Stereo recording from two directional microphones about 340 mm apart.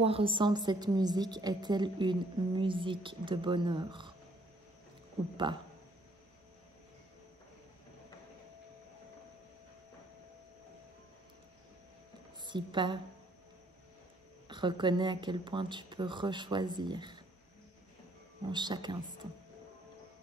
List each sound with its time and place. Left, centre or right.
0.0 s a woman's voice: centre
12.4 s a woman's voice: centre
14.5 s a woman's voice: centre
18.5 s a woman's voice: centre